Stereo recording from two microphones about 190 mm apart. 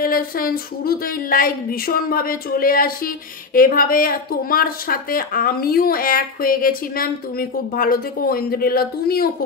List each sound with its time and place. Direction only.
0.0 s speech: 50° left (ahead or behind)